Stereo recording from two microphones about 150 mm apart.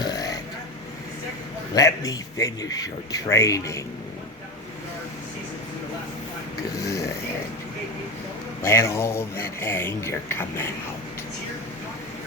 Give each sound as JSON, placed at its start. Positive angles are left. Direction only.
{"t": 0.0, "sound": "vehicle", "side_deg": 25}
{"t": 1.7, "sound": "a man's voice", "side_deg": 25}
{"t": 6.8, "sound": "snoring", "side_deg": 20}
{"t": 8.6, "sound": "speech", "side_deg": 20}